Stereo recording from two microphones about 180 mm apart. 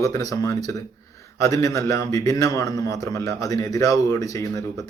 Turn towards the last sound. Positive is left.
turn(degrees=20)  # may be behind; listen again after turning